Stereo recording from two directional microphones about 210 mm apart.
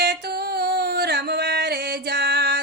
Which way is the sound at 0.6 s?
50° right (ahead or behind).